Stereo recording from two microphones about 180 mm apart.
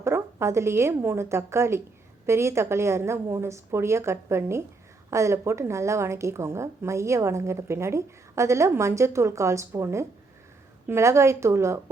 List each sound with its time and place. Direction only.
0.0 s a woman's voice: 15° right (ahead or behind)